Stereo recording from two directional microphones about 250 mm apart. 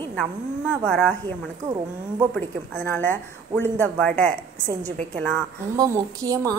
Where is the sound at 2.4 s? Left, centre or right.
Centre.